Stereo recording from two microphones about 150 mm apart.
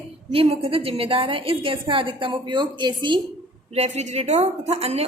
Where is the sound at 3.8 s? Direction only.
50° right (ahead or behind).